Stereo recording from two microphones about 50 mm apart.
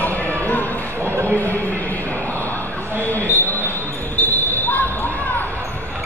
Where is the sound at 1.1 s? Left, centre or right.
Right.